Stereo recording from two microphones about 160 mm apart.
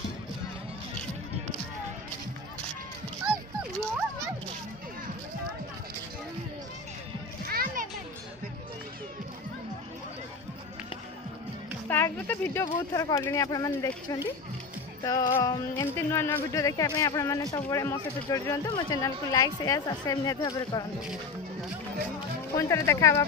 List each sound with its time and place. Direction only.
7.4 s music: 60° right (ahead or behind)
11.9 s speech: 15° left (ahead or behind)
22.6 s speech: 20° left (ahead or behind)